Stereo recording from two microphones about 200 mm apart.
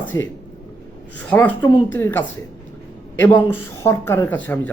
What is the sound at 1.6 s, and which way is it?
Speech, 20° left (ahead or behind).